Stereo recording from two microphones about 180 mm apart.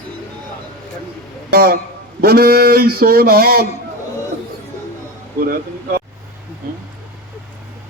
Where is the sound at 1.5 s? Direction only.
60° right (ahead or behind).